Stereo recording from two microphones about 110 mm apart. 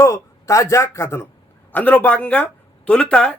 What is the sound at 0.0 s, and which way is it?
Speech, 25° left (ahead or behind).